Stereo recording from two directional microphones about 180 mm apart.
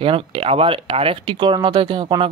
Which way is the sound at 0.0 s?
30° right (ahead or behind).